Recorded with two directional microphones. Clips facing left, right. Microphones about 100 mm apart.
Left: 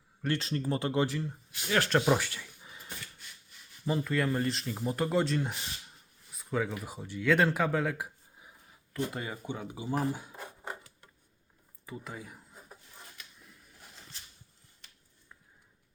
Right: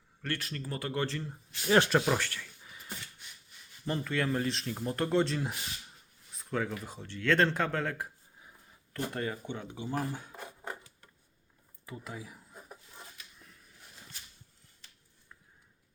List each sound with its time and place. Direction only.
0.2 s speech: 20° left (ahead or behind)
1.0 s speech: 10° left (ahead or behind)
3.8 s speech: 5° left (ahead or behind)
6.3 s a sound: 5° left (ahead or behind)
6.7 s speech: 10° left (ahead or behind)
11.9 s a sound: centre (ahead or behind)